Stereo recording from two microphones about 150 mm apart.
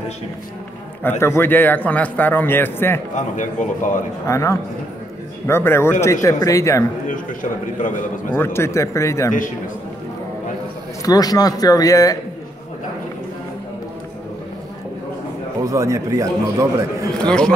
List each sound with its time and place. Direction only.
1.2 s a man's voice: 15° left (ahead or behind)
3.3 s speech: 60° left (ahead or behind)
4.3 s a man's voice: 20° left (ahead or behind)
8.3 s speech: 15° left (ahead or behind)
11.1 s speech: 25° left (ahead or behind)
15.6 s a man's voice: 20° right (ahead or behind)
17.2 s a man's voice: 5° left (ahead or behind)